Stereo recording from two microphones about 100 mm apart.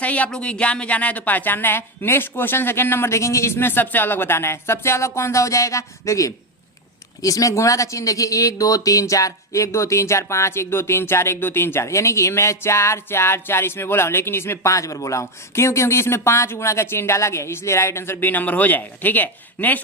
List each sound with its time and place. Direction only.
0.0 s speech: 15° left (ahead or behind)